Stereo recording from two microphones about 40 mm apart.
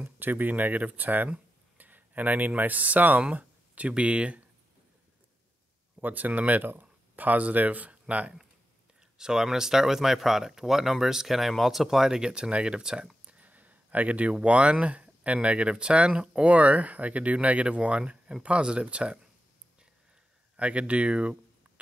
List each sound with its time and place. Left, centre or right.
0.0 s speech: right
3.3 s a sound: right
3.9 s speech: right
5.9 s speech: right
9.2 s speech: centre
13.0 s a sound: right
13.5 s speech: right
20.5 s speech: right